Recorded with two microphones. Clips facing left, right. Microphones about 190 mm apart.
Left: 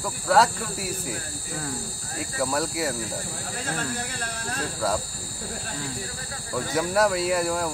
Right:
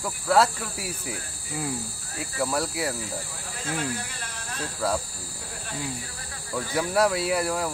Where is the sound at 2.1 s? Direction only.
Centre (ahead or behind).